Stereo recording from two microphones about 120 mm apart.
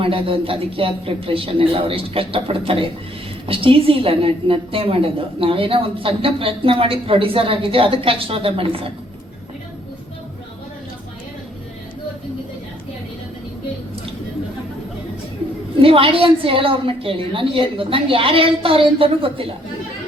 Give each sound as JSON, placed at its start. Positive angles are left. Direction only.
{"t": 0.0, "sound": "a woman's voice", "side_deg": -50}
{"t": 15.8, "sound": "a woman's voice", "side_deg": -50}